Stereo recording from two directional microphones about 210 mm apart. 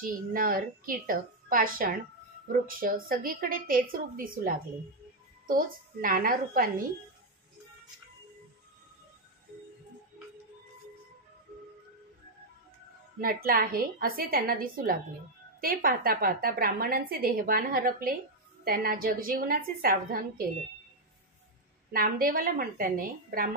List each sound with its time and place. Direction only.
0.0 s a woman's voice: 40° right (ahead or behind)
13.2 s a woman's voice: 45° right (ahead or behind)
21.9 s a woman's voice: 45° right (ahead or behind)